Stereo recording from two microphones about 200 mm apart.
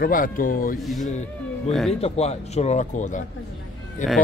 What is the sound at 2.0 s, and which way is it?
Speech, 30° left (ahead or behind).